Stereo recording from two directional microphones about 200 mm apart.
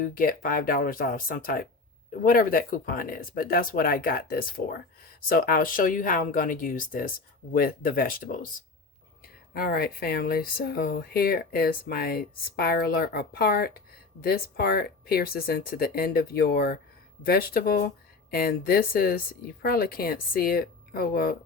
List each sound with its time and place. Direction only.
0.0 s speech: 45° left (ahead or behind)